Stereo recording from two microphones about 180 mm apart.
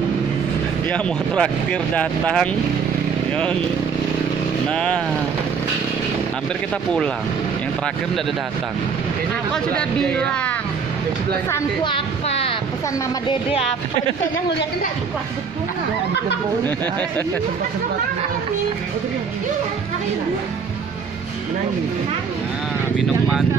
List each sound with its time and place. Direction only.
0.8 s speech: 5° left (ahead or behind)
4.6 s speech: 5° left (ahead or behind)
9.8 s speech: 5° left (ahead or behind)
11.8 s a sound: 30° left (ahead or behind)
13.3 s speech: 30° left (ahead or behind)